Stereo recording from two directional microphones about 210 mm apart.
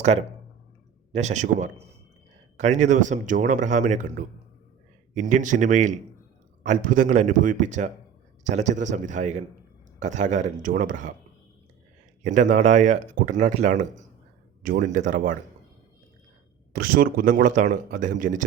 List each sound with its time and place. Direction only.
0.0 s speech: 30° right (ahead or behind)
12.2 s speech: 35° right (ahead or behind)
16.7 s speech: 45° right (ahead or behind)